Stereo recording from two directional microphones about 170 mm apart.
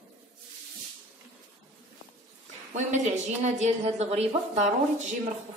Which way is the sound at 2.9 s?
45° right (ahead or behind).